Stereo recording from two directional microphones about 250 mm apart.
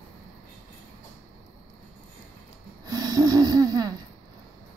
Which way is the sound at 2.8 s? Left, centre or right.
Centre.